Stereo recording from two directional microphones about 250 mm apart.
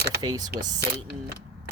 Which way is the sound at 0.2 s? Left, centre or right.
Centre.